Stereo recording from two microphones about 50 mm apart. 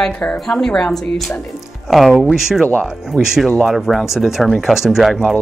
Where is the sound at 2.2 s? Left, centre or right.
Centre.